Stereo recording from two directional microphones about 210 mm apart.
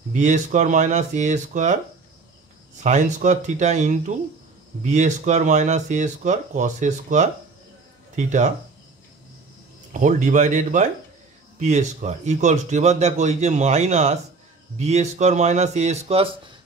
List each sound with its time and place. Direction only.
0.1 s a man's voice: 35° right (ahead or behind)
2.8 s a man's voice: 35° right (ahead or behind)
9.9 s a man's voice: 35° right (ahead or behind)